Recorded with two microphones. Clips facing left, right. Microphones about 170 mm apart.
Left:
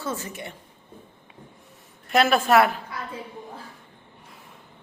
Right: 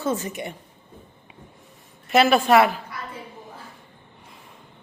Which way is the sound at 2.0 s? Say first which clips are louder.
Right 3 dB; centre (ahead or behind).